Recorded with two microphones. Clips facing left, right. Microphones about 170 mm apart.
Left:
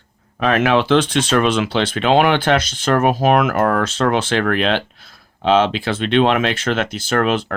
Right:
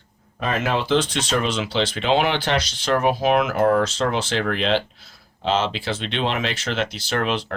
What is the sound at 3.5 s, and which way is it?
Speech, 60° left (ahead or behind).